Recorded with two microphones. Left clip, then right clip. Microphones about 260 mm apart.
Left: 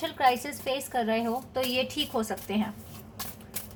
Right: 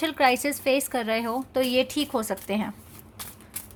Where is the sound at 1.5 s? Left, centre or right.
Right.